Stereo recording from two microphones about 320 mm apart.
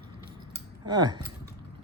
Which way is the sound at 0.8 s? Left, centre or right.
Centre.